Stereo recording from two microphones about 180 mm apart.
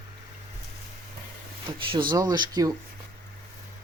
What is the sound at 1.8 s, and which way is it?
Speech, 25° right (ahead or behind).